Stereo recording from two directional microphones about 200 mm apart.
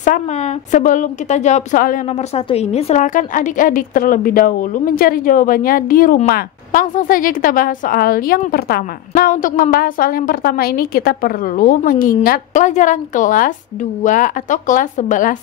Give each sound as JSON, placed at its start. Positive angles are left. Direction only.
{"t": 0.0, "sound": "a woman's voice", "side_deg": 35}